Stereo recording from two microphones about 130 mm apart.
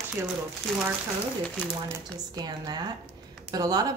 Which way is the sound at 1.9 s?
30° right (ahead or behind).